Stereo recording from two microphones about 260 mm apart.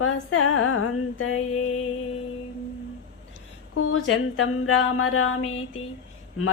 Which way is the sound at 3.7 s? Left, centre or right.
Left.